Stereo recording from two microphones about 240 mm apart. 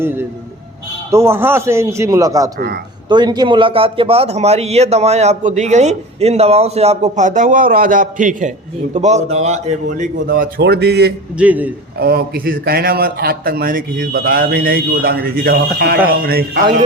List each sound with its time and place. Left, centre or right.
0.0 s a man's voice: centre; by 11.1 s right
11.3 s a man's voice: centre
11.9 s a man's voice: right